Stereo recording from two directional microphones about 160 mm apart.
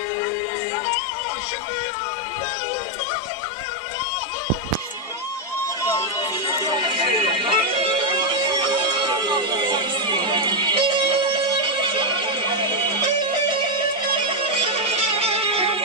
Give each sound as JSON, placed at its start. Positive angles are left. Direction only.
{"t": 6.7, "sound": "music", "side_deg": -30}
{"t": 14.6, "sound": "music", "side_deg": -40}